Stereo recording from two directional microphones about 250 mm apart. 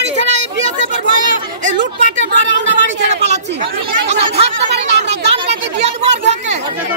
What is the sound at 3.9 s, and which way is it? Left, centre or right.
Speech, right.